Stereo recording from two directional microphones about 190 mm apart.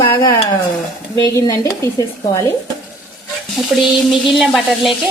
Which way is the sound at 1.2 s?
20° left (ahead or behind).